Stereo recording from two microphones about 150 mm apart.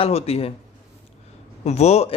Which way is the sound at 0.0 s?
45° left (ahead or behind).